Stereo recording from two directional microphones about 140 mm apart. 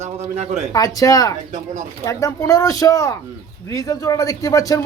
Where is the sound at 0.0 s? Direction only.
55° right (ahead or behind).